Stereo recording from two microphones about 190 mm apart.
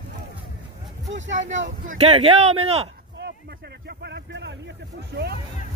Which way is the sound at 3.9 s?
60° right (ahead or behind).